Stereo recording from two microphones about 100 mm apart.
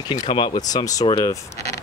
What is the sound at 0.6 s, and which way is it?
Speech, 40° left (ahead or behind).